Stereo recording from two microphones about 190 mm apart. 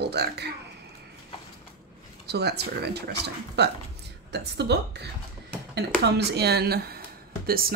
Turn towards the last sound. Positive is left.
turn(degrees=-50)  # may be behind; listen again after turning